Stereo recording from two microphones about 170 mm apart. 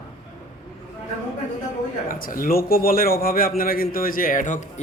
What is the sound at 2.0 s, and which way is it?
Speech, 55° left (ahead or behind).